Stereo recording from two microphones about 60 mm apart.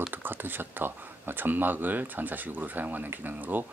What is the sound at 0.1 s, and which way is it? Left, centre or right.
Speech, right.